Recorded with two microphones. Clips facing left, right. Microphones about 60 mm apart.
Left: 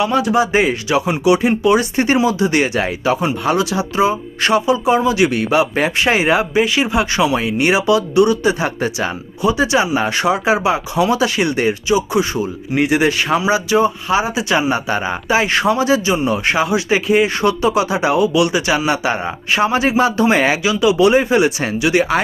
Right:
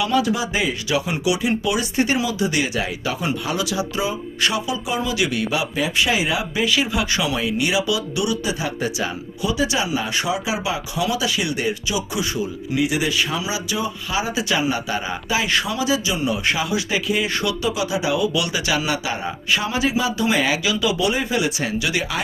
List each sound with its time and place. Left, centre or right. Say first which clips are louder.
0.0 s speech: left 5 dB; left
3.0 s speech: left 7 dB; left
6.5 s speech: left 5 dB; left
9.5 s speech: left 7 dB; left
11.9 s speech: left 9 dB; left
12.7 s speech: left 6 dB; left
18.9 s speech: left 6 dB; left